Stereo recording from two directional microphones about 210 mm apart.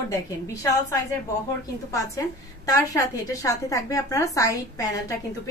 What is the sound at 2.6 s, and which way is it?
A woman's voice, 15° left (ahead or behind).